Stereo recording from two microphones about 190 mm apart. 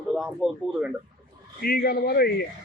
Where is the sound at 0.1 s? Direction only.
Centre (ahead or behind).